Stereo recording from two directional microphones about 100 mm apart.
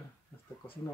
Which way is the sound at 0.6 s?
15° left (ahead or behind).